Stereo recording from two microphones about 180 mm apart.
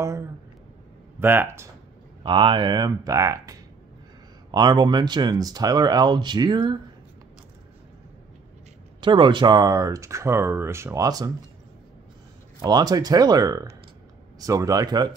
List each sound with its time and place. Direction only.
0.0 s a sound: 15° right (ahead or behind)
1.2 s speech: 10° right (ahead or behind)
2.2 s speech: 30° right (ahead or behind)
9.0 s speech: 25° right (ahead or behind)
12.6 s speech: 20° right (ahead or behind)